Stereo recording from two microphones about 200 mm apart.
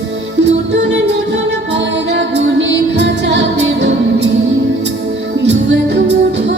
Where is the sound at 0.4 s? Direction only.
60° right (ahead or behind).